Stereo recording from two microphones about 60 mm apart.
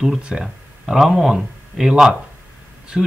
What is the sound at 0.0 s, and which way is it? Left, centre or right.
A man's voice, centre.